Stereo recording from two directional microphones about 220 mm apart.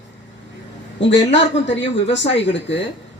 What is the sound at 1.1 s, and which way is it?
Speech, 55° left (ahead or behind).